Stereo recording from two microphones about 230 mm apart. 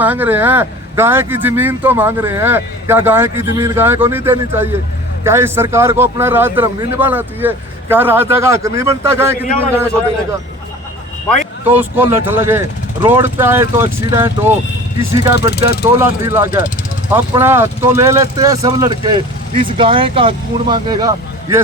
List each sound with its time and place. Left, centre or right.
0.0 s speech: centre
11.6 s speech: centre
15.4 s speech: left
15.8 s speech: centre